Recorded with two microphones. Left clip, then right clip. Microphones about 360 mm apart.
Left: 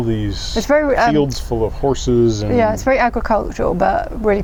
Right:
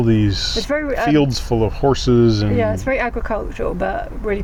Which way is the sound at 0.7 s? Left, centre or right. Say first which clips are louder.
Left 9 dB; left.